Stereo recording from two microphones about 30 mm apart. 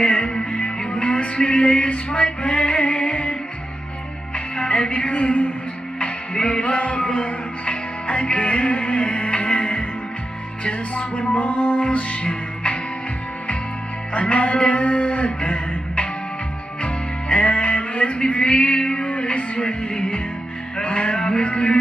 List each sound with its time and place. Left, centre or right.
0.0 s music: left
0.3 s music: left
1.1 s music: left
4.6 s music: left
5.0 s a man's voice: left
6.5 s music: left
11.1 s music: left
14.2 s music: left
20.8 s music: left